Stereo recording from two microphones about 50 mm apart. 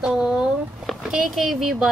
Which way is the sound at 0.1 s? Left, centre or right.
Centre.